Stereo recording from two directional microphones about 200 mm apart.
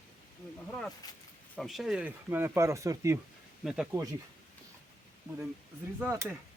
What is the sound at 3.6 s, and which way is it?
Speech, centre (ahead or behind).